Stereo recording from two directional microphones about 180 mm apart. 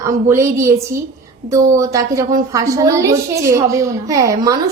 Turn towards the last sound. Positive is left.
turn(degrees=-20)  # may be behind; listen again after turning